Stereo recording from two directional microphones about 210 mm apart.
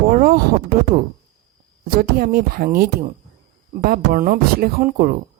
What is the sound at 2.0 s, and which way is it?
Speech, 45° right (ahead or behind).